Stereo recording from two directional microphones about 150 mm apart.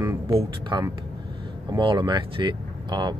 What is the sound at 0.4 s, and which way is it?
Speech, 30° right (ahead or behind).